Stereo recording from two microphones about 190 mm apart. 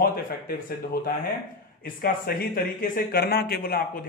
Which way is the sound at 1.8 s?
50° left (ahead or behind).